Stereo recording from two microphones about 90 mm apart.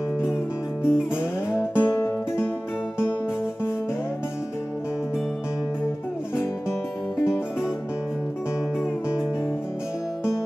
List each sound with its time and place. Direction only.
0.8 s music: 10° right (ahead or behind)
1.6 s music: 30° left (ahead or behind)